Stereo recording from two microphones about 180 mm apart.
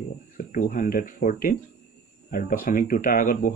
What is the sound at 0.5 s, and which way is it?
Speech, 50° left (ahead or behind).